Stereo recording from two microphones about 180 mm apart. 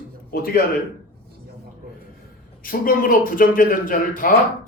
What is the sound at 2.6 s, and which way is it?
Speech, 50° left (ahead or behind).